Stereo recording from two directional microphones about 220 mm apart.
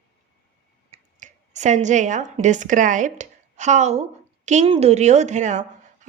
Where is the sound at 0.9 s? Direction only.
35° right (ahead or behind).